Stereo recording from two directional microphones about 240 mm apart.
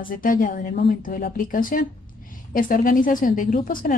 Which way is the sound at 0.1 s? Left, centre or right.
Left.